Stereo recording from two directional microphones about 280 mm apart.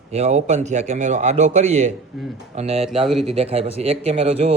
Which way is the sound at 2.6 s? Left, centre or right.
Right.